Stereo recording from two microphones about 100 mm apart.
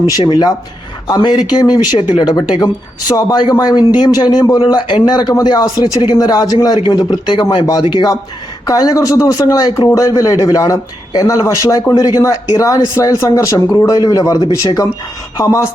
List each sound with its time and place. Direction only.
0.3 s speech: 50° left (ahead or behind)
4.7 s speech: 50° left (ahead or behind)
6.7 s speech: 50° left (ahead or behind)
8.6 s speech: 40° left (ahead or behind)